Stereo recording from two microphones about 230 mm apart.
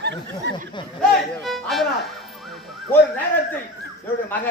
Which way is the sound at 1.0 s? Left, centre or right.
Centre.